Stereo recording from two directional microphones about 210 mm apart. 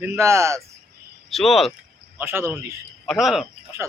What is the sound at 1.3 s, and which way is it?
Speech, centre (ahead or behind).